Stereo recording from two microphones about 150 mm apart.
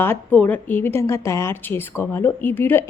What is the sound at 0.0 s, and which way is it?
A woman's voice, 15° left (ahead or behind).